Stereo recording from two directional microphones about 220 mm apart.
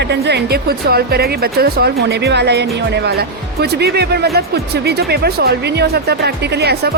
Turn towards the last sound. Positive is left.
turn(degrees=-45)  # may be behind; listen again after turning